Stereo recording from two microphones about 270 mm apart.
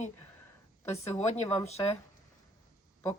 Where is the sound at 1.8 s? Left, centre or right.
Centre.